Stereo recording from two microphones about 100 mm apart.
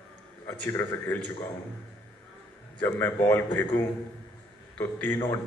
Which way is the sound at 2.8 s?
15° left (ahead or behind).